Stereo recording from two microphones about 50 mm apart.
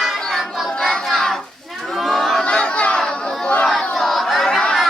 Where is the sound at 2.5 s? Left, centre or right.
Centre.